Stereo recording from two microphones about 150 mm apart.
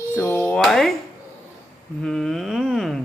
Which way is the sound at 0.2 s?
10° left (ahead or behind).